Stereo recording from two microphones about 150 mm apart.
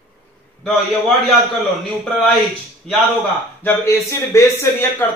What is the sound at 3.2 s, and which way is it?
A man's voice, 15° left (ahead or behind).